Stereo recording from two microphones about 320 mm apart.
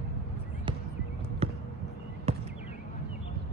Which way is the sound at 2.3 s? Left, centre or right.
Centre.